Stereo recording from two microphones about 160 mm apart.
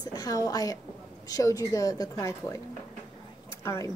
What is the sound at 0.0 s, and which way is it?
A woman's voice, 25° left (ahead or behind).